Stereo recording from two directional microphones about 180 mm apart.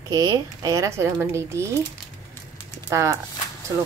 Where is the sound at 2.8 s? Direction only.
20° right (ahead or behind).